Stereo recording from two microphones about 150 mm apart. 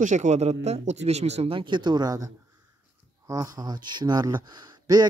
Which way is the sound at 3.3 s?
25° right (ahead or behind).